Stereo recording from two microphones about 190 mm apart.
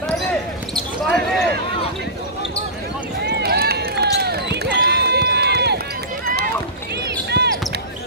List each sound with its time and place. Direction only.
0.7 s basketball bounce: centre (ahead or behind)
3.3 s run: 60° right (ahead or behind)
7.2 s basketball bounce: 60° right (ahead or behind)